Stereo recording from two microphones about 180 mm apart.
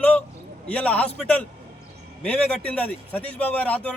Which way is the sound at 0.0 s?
10° left (ahead or behind).